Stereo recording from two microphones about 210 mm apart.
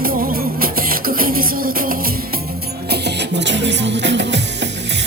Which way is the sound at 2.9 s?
55° right (ahead or behind).